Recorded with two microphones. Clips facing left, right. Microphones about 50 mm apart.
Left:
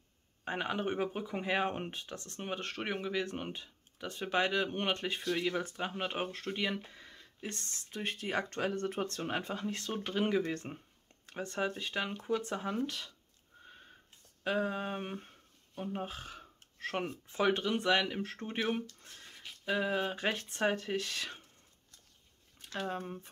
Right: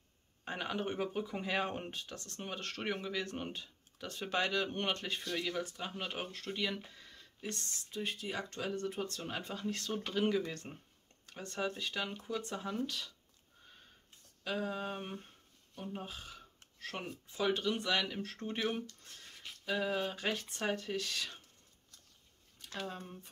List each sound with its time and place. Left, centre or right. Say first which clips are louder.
0.5 s speech: left 3 dB; left
7.5 s speech: even; left
9.2 s speech: left 4 dB; left
14.4 s speech: left 4 dB; left
22.7 s speech: left 5 dB; left